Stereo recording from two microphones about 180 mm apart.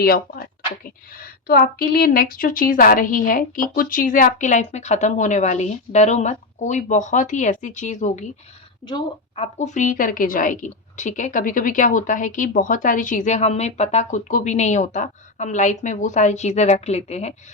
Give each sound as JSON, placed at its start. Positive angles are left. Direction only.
{"t": 0.0, "sound": "a woman's voice", "side_deg": 60}
{"t": 8.9, "sound": "a woman's voice", "side_deg": 30}